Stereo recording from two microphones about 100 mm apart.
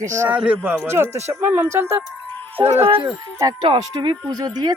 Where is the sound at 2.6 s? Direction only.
50° right (ahead or behind).